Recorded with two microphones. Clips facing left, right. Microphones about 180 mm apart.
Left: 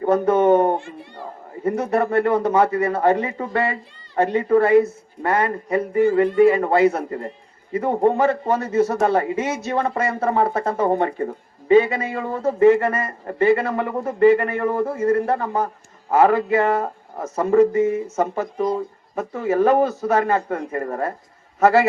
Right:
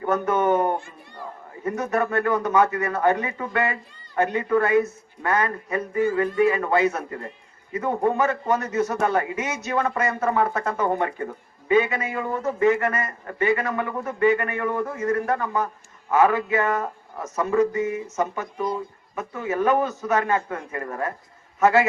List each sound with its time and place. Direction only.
0.0 s a man's voice: 30° left (ahead or behind)